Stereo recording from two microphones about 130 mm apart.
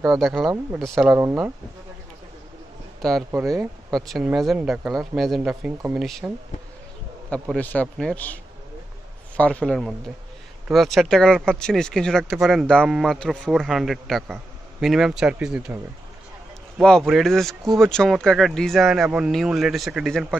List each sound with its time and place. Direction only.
0.1 s speech: centre (ahead or behind)
1.1 s speech: 15° right (ahead or behind)
3.0 s speech: centre (ahead or behind)
3.3 s speech: 20° right (ahead or behind)
3.9 s speech: centre (ahead or behind)
7.5 s speech: 10° left (ahead or behind)
9.4 s speech: 10° left (ahead or behind); by 15.8 s 10° right (ahead or behind)
16.8 s speech: 5° left (ahead or behind)